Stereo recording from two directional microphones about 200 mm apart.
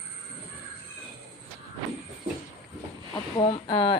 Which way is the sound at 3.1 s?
25° left (ahead or behind).